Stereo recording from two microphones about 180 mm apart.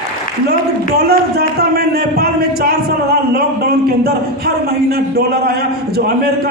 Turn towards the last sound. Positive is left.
turn(degrees=-60)  # may be behind; listen again after turning